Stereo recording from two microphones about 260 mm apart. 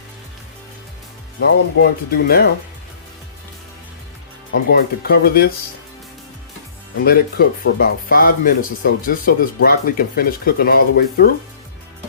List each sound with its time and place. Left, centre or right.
1.5 s speech: left
4.7 s speech: left
7.0 s speech: left